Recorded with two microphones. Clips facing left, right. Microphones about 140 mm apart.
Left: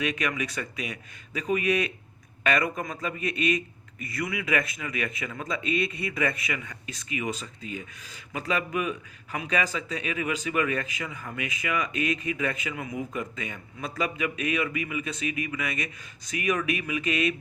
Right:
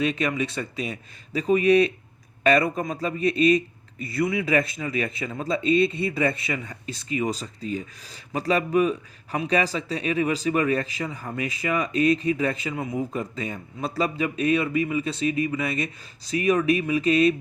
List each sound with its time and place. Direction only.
0.0 s a man's voice: 30° right (ahead or behind)